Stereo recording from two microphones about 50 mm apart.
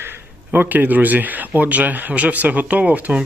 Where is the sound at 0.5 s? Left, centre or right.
Right.